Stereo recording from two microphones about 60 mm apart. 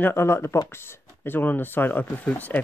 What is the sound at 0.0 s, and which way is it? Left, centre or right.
Speech, left.